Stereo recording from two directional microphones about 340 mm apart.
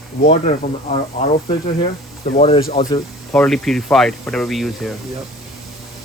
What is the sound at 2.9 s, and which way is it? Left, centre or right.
Speech, centre.